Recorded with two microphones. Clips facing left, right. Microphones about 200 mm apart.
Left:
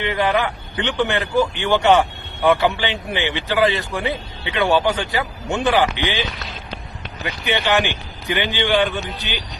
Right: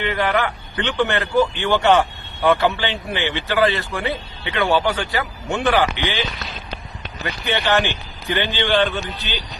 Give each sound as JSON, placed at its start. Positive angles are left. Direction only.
{"t": 0.0, "sound": "speech", "side_deg": 15}
{"t": 7.4, "sound": "speech", "side_deg": 15}